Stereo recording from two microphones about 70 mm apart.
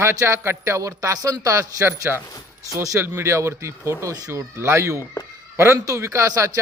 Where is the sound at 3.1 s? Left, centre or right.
Right.